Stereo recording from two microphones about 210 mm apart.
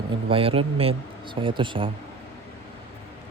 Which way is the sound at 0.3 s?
25° right (ahead or behind).